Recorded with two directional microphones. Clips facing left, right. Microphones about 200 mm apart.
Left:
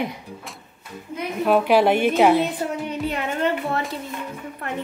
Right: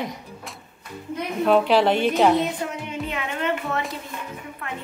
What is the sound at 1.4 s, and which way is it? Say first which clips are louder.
A woman's voice: left 1 dB; 10° left (ahead or behind).